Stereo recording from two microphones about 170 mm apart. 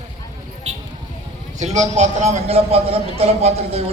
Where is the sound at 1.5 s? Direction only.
45° right (ahead or behind).